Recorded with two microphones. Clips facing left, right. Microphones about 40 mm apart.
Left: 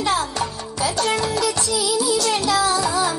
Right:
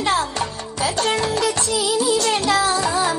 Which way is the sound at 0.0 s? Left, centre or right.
Right.